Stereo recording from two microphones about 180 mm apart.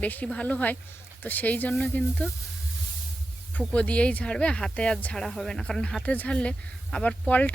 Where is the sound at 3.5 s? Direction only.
5° left (ahead or behind).